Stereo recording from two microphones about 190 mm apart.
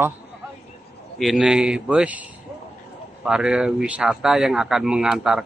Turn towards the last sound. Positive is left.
turn(degrees=-5)  # may be behind; listen again after turning